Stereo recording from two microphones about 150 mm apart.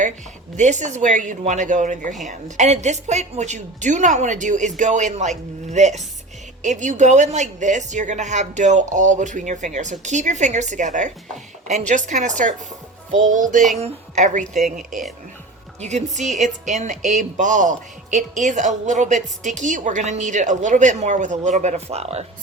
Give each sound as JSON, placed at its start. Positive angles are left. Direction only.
{"t": 0.5, "sound": "a woman's voice", "side_deg": -50}
{"t": 14.4, "sound": "speech", "side_deg": 0}
{"t": 15.8, "sound": "a woman's voice", "side_deg": -50}